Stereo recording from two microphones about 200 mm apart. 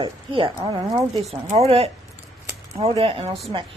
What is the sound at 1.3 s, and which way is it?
A woman's voice, 30° right (ahead or behind).